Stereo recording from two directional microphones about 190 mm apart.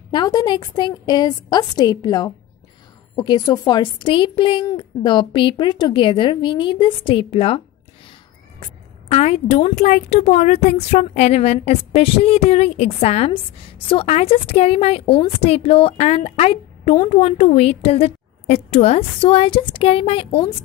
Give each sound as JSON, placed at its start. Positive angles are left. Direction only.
{"t": 0.1, "sound": "a woman's voice", "side_deg": 20}
{"t": 9.1, "sound": "a woman's voice", "side_deg": 35}